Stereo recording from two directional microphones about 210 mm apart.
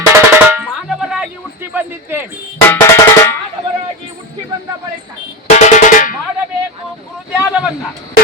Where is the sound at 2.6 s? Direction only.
10° left (ahead or behind).